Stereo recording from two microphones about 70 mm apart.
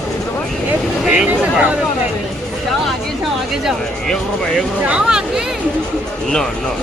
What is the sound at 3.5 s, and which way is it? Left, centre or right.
Speech, centre.